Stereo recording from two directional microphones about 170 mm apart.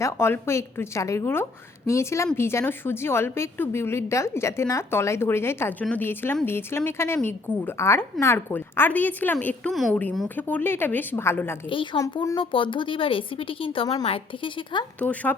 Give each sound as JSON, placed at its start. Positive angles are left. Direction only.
{"t": 0.0, "sound": "a woman's voice", "side_deg": 15}
{"t": 11.7, "sound": "speech", "side_deg": 30}
{"t": 11.9, "sound": "a woman's voice", "side_deg": 20}
{"t": 14.9, "sound": "a woman's voice", "side_deg": 10}